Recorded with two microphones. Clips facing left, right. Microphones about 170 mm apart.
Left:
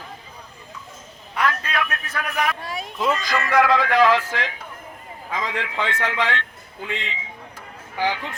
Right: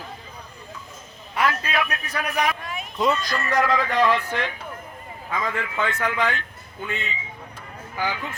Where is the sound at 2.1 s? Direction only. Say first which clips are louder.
Right 1 dB; centre (ahead or behind).